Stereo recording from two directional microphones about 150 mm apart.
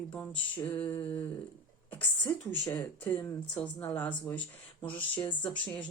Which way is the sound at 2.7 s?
10° left (ahead or behind).